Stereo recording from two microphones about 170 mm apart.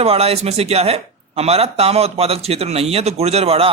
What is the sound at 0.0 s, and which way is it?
Speech, 35° right (ahead or behind).